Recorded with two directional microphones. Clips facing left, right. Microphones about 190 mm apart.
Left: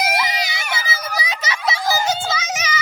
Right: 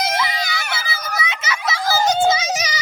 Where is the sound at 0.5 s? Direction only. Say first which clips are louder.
Even; 15° left (ahead or behind).